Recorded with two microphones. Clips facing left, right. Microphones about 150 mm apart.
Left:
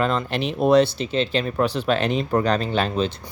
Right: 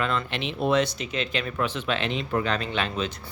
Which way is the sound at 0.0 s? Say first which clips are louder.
Left 5 dB; 40° left (ahead or behind).